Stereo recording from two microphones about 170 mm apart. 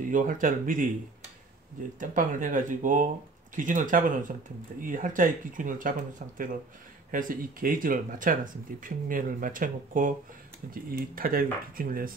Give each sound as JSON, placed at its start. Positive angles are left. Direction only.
{"t": 0.0, "sound": "speech", "side_deg": -50}
{"t": 2.0, "sound": "speech", "side_deg": -50}